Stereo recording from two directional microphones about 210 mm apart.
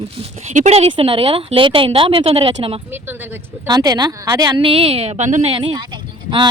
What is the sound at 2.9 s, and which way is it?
A woman's voice, 10° right (ahead or behind).